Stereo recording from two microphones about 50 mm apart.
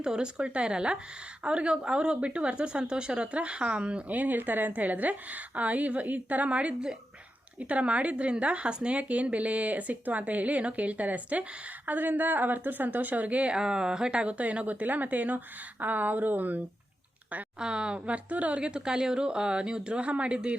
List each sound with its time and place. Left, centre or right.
0.0 s a woman's voice: centre; by 16.6 s right
17.6 s speech: centre